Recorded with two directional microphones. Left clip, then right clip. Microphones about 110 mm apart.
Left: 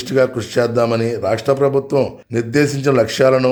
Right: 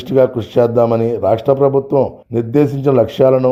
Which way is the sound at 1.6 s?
50° left (ahead or behind).